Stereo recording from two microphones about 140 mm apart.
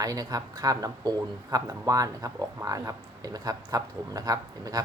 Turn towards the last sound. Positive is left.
turn(degrees=-25)  # may be behind; listen again after turning